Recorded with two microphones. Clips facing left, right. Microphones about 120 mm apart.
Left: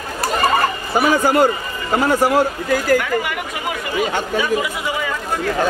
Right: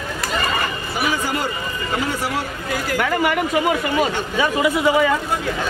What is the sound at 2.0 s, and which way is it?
Speech, 45° left (ahead or behind).